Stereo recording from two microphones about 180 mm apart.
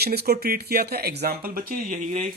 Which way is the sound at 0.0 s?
60° right (ahead or behind).